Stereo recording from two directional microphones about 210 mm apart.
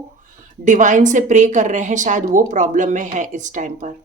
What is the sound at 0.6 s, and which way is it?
A woman's voice, 35° right (ahead or behind).